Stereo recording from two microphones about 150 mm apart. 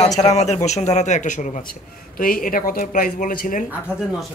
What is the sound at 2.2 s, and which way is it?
Speech, 70° left (ahead or behind).